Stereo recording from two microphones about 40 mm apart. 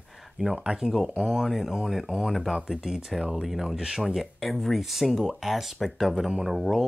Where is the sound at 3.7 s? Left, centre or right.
Centre.